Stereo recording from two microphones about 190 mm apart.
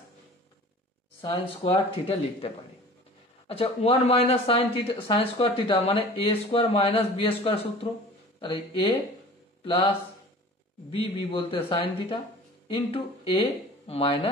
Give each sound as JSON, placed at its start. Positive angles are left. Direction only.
{"t": 1.2, "sound": "speech", "side_deg": 30}
{"t": 10.9, "sound": "speech", "side_deg": 30}